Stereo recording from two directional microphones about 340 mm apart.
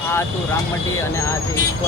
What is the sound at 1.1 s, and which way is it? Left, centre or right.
Speech, centre.